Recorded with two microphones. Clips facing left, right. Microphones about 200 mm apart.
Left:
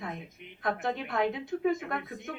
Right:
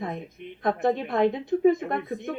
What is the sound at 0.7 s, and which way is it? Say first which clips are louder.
Speech: right 7 dB; 50° right (ahead or behind).